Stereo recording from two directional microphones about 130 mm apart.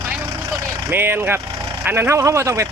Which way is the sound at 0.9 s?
15° right (ahead or behind).